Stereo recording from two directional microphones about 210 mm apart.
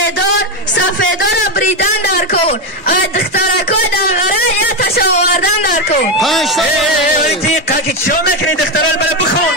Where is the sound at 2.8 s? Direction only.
45° left (ahead or behind).